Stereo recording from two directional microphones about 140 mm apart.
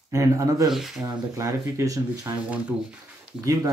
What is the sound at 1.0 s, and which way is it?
Speech, 25° right (ahead or behind).